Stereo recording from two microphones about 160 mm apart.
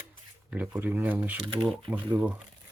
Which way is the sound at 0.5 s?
10° right (ahead or behind).